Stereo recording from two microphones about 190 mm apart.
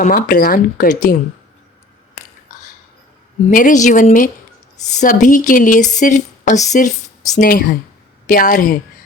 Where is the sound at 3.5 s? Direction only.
45° left (ahead or behind).